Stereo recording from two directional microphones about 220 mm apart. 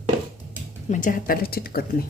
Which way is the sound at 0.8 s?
35° left (ahead or behind).